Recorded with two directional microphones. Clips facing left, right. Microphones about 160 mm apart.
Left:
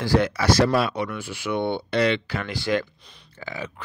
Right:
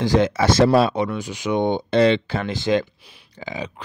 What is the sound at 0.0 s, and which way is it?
Speech, 20° right (ahead or behind).